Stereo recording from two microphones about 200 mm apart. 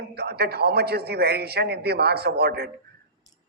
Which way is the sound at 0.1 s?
55° right (ahead or behind).